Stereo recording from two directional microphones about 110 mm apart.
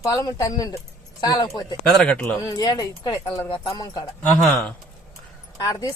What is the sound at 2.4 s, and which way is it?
Speech, 35° left (ahead or behind).